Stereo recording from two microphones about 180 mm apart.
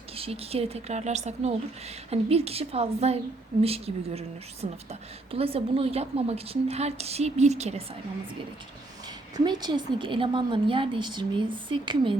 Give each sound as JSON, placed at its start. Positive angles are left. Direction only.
{"t": 0.2, "sound": "a woman's voice", "side_deg": -35}
{"t": 9.3, "sound": "a woman's voice", "side_deg": -25}